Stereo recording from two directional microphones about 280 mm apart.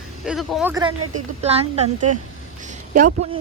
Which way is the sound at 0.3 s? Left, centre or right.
Centre.